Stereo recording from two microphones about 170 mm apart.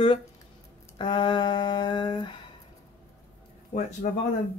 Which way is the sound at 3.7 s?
40° left (ahead or behind).